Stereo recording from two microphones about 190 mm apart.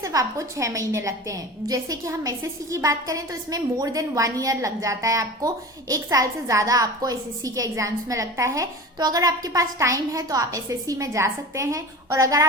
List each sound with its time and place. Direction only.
0.0 s a woman's voice: 20° right (ahead or behind)